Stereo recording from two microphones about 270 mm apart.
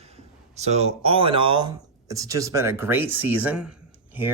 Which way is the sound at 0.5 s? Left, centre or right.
Right.